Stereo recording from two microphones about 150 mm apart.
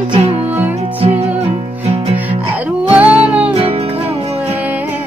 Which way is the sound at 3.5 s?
40° right (ahead or behind).